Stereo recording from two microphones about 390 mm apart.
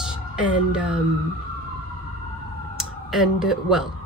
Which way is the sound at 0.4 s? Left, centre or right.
Centre.